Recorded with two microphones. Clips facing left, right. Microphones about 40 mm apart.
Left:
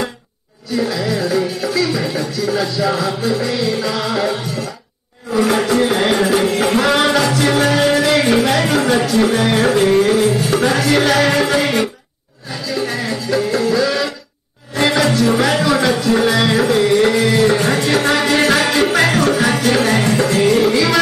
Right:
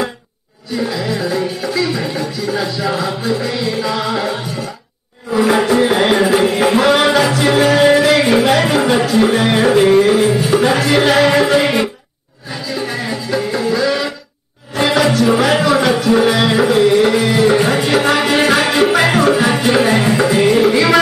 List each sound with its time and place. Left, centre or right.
0.7 s music: centre
12.6 s music: centre